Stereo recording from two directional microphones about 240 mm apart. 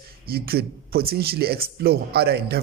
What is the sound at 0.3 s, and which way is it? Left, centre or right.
A woman's voice, right.